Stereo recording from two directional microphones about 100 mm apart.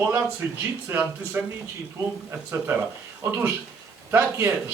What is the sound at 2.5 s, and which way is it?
Speech, 20° right (ahead or behind).